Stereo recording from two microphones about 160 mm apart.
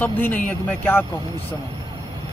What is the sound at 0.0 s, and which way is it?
Speech, 10° left (ahead or behind).